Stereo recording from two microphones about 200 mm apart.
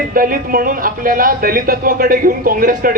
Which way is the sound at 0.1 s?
45° right (ahead or behind).